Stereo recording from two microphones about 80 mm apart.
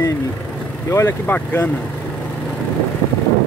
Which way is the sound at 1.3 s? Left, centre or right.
Left.